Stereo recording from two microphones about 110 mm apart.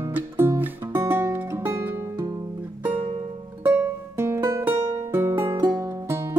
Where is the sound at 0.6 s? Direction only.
20° right (ahead or behind).